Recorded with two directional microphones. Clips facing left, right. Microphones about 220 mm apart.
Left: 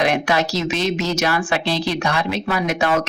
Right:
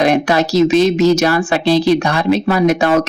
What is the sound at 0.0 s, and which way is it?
A woman's voice, 40° right (ahead or behind).